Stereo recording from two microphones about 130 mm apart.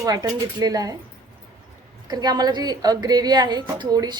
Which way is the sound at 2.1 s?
30° right (ahead or behind).